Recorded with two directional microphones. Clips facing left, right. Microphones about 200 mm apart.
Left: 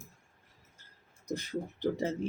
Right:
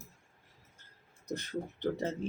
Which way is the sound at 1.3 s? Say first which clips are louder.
Left 2 dB; 10° left (ahead or behind).